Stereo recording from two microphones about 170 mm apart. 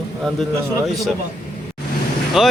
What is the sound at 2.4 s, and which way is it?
Speech, 5° right (ahead or behind).